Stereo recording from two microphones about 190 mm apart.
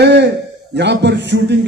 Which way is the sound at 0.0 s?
65° right (ahead or behind).